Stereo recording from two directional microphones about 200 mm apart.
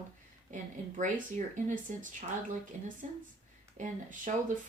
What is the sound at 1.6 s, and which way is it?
Speech, 40° right (ahead or behind).